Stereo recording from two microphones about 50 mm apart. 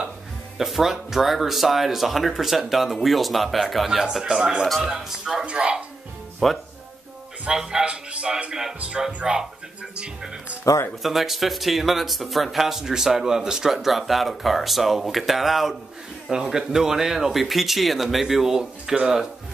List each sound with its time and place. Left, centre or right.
0.6 s speech: centre
4.2 s speech: centre
4.6 s speech: centre
4.8 s speech: centre
6.4 s speech: centre
7.8 s speech: right
10.6 s speech: left
11.0 s speech: centre